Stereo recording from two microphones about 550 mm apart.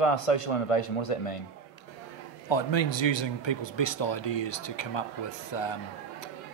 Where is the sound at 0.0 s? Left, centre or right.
Left.